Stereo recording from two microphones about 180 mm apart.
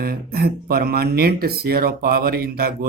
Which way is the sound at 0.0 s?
60° right (ahead or behind).